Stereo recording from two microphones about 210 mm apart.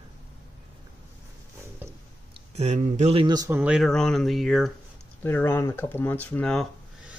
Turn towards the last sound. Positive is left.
turn(degrees=0)  # may be behind; listen again after turning